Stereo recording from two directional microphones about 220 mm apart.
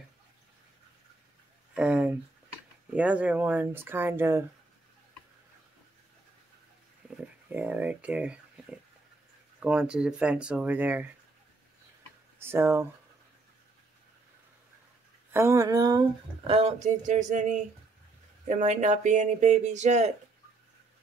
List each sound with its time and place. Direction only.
1.8 s speech: 5° right (ahead or behind)
7.2 s a sound: 5° right (ahead or behind)
9.6 s speech: 5° right (ahead or behind)
12.4 s speech: 10° right (ahead or behind)
15.3 s speech: 15° right (ahead or behind)
16.4 s speech: 30° right (ahead or behind)